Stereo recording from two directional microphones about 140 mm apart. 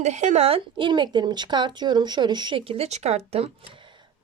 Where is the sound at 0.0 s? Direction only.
55° right (ahead or behind).